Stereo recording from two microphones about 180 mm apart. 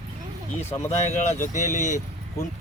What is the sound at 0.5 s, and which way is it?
Speech, 10° left (ahead or behind).